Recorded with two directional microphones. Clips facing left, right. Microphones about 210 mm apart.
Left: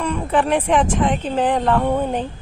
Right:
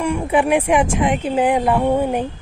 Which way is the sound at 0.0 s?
10° right (ahead or behind).